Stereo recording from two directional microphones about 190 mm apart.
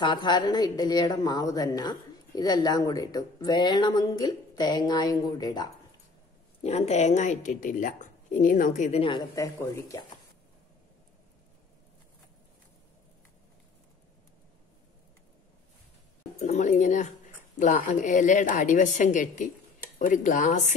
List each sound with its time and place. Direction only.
0.0 s a woman's voice: 25° left (ahead or behind)
6.6 s a woman's voice: 35° left (ahead or behind)
9.0 s speech: 20° left (ahead or behind)
16.3 s a woman's voice: 40° left (ahead or behind)